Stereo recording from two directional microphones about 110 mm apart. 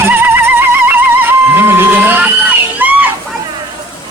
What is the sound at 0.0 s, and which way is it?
Music, 20° right (ahead or behind).